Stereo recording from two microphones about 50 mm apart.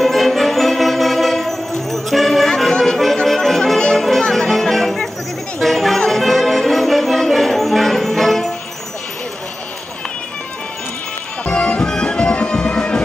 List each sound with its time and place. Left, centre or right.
0.0 s music: centre
11.4 s music: centre